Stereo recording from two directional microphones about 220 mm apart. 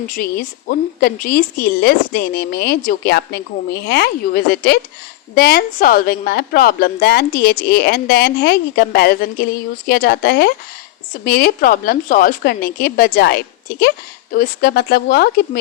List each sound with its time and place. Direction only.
0.1 s a woman's voice: 45° left (ahead or behind)